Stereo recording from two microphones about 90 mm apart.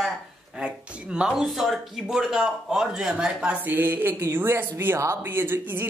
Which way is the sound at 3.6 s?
20° right (ahead or behind).